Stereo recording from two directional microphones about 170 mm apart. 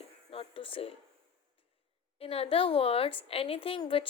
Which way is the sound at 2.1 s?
35° left (ahead or behind).